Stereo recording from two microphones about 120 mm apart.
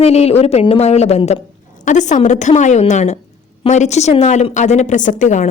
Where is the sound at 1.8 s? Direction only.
90° left.